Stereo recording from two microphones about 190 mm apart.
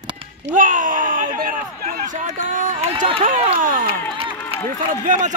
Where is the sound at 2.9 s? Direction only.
30° right (ahead or behind).